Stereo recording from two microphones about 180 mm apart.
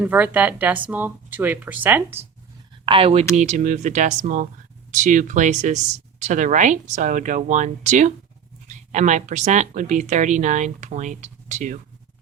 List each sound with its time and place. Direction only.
0.0 s a woman's voice: 10° right (ahead or behind)
2.8 s speech: 30° right (ahead or behind)